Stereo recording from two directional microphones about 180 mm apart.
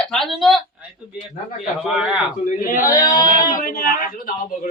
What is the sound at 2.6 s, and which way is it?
Speech, 50° left (ahead or behind).